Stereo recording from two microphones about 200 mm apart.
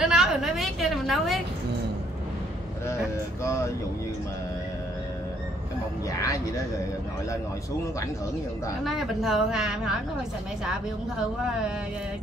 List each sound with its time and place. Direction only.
0.0 s a sound: centre (ahead or behind)
3.4 s speech: 15° left (ahead or behind)
6.2 s speech: 15° left (ahead or behind)
8.8 s a woman's voice: centre (ahead or behind)